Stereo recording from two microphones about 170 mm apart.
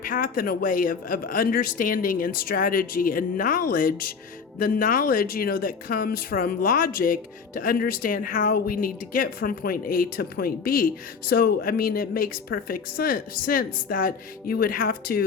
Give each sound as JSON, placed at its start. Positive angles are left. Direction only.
{"t": 0.0, "sound": "speech", "side_deg": 55}